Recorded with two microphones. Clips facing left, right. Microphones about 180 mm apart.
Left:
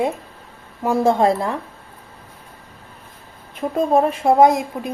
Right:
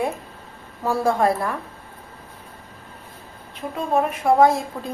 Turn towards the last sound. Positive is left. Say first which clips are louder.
# left 3 dB
turn(degrees=15)  # may be behind; listen again after turning